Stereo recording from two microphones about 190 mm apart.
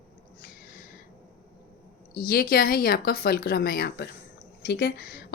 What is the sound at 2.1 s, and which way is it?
A woman's voice, 50° left (ahead or behind).